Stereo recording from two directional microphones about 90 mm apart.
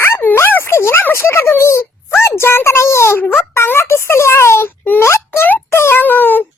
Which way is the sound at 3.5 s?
30° left (ahead or behind).